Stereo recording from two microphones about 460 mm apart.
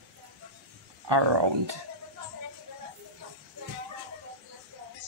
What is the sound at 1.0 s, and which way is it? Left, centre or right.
Speech, right.